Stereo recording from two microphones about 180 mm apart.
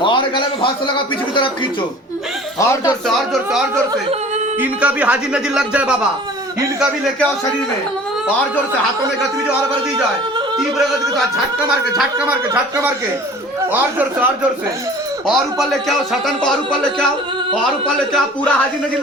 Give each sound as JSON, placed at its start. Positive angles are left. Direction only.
{"t": 0.0, "sound": "a man's voice", "side_deg": 25}
{"t": 2.6, "sound": "speech", "side_deg": 20}
{"t": 4.6, "sound": "speech", "side_deg": -5}
{"t": 13.7, "sound": "speech", "side_deg": -10}
{"t": 15.3, "sound": "speech", "side_deg": 0}